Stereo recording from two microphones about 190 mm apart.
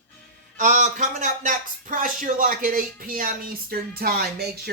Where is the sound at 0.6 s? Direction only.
40° right (ahead or behind).